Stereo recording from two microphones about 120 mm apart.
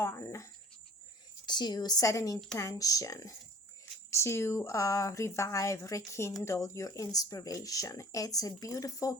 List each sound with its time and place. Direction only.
0.0 s cricket: 25° left (ahead or behind)
1.5 s speech: 35° left (ahead or behind)